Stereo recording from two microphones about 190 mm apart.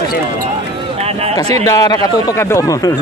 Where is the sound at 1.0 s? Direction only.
35° right (ahead or behind).